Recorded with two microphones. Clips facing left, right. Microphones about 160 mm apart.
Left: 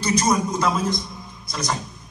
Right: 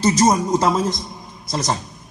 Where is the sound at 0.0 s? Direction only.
35° right (ahead or behind).